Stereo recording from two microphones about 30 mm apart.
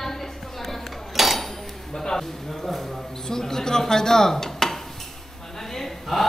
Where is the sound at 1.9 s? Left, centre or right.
Centre.